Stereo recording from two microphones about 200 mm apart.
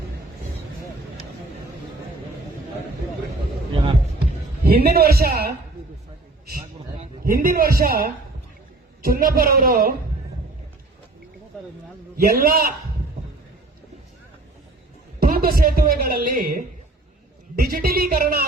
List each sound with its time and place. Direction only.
4.6 s a man's voice: 50° right (ahead or behind)
7.0 s a man's voice: 45° right (ahead or behind)
12.1 s a man's voice: 45° right (ahead or behind)
15.2 s a man's voice: 45° right (ahead or behind)